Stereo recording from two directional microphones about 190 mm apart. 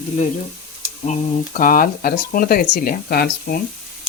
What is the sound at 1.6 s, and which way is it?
Speech, 45° left (ahead or behind).